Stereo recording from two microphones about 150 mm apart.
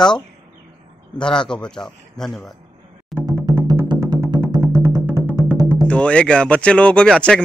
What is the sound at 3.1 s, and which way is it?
Music, centre (ahead or behind).